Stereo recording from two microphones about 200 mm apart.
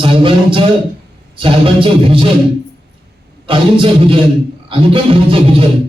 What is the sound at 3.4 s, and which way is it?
Music, 25° right (ahead or behind).